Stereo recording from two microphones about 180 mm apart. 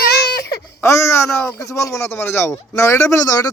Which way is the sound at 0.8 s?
15° left (ahead or behind).